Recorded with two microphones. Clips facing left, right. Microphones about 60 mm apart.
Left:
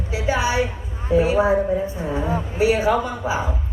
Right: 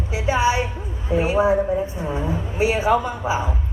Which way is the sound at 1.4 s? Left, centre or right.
Left.